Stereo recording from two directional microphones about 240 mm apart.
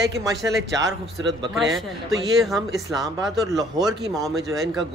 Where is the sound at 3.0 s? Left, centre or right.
Centre.